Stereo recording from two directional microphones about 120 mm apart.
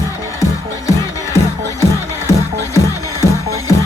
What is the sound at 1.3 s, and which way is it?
Music, 25° left (ahead or behind).